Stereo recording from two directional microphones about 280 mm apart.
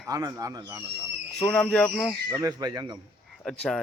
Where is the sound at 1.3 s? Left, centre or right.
Centre.